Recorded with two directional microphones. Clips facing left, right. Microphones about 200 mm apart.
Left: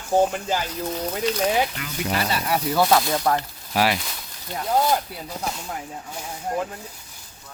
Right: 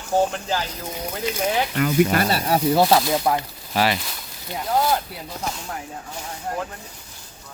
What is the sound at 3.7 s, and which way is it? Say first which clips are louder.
Speech: even; 5° left (ahead or behind).